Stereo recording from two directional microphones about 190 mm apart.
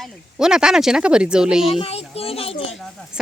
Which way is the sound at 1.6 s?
30° left (ahead or behind).